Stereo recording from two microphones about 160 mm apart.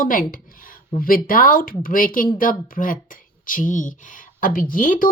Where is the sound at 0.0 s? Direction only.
60° left (ahead or behind).